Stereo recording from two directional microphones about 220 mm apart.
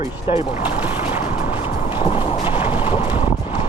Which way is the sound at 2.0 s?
25° left (ahead or behind).